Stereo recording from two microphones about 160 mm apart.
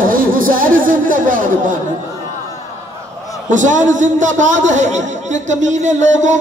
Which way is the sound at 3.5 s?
50° right (ahead or behind).